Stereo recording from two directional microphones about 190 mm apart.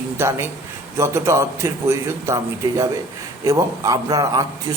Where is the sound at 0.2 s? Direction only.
15° right (ahead or behind).